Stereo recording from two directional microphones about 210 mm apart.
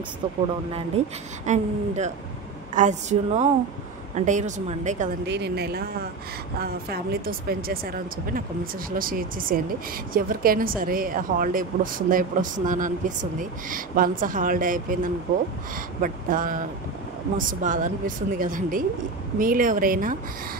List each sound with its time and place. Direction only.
0.7 s a woman's voice: 30° right (ahead or behind)
5.2 s a woman's voice: 55° right (ahead or behind)